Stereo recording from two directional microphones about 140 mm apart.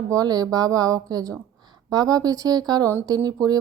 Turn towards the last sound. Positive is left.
turn(degrees=-30)  # may be behind; listen again after turning